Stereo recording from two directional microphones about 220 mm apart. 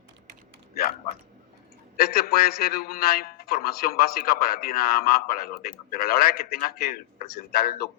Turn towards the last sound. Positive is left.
turn(degrees=45)  # may be behind; listen again after turning